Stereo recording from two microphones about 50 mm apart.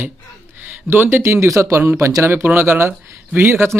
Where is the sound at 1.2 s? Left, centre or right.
Right.